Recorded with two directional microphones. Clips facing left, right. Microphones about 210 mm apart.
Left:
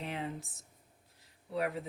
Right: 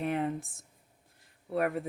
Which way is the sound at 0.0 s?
50° right (ahead or behind).